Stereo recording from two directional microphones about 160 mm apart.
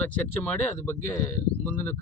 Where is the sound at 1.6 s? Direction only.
10° left (ahead or behind).